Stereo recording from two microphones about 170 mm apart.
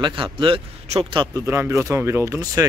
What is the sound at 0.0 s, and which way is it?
Speech, 30° right (ahead or behind).